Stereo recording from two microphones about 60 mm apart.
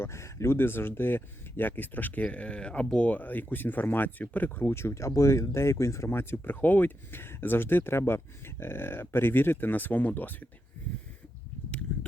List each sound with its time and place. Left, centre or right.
0.0 s speech: left
4.7 s speech: left